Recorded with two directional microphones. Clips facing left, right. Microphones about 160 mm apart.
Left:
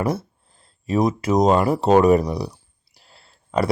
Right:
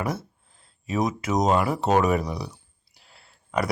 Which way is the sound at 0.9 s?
35° left (ahead or behind).